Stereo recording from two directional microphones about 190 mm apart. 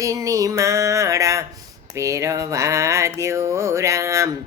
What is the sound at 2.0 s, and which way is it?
Music, 15° right (ahead or behind).